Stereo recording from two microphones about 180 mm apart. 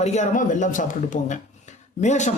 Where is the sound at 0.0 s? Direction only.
40° left (ahead or behind).